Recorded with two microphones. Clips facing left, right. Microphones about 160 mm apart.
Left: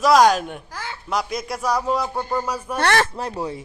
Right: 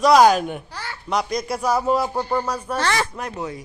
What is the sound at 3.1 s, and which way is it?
Speech, 30° left (ahead or behind).